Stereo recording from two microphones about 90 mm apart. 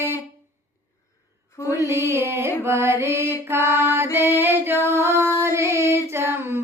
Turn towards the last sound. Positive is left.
turn(degrees=-25)  # may be behind; listen again after turning